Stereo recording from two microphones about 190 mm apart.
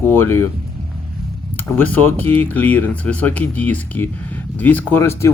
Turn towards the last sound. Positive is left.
turn(degrees=15)  # may be behind; listen again after turning